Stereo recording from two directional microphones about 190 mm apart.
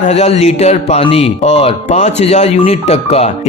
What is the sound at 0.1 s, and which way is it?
Speech, 35° left (ahead or behind).